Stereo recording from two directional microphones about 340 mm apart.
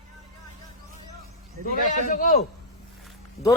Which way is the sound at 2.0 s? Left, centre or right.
Left.